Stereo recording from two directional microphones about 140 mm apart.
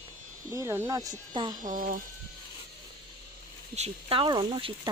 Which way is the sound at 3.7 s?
45° right (ahead or behind).